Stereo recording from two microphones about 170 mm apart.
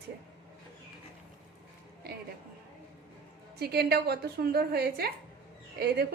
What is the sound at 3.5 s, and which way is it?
A woman's voice, 70° right (ahead or behind).